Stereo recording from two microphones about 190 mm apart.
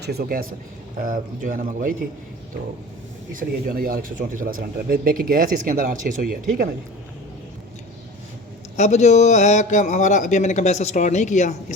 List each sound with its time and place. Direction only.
0.0 s a man's voice: 55° right (ahead or behind)
3.3 s a man's voice: 50° right (ahead or behind)
8.7 s a man's voice: 35° left (ahead or behind)